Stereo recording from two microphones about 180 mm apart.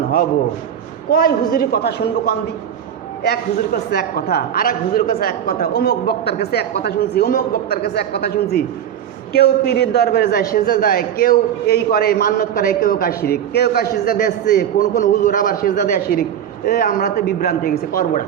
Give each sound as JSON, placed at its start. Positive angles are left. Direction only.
{"t": 1.1, "sound": "a man's voice", "side_deg": 55}